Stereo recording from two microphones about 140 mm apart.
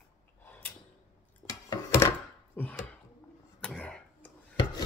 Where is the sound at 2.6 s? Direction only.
15° left (ahead or behind).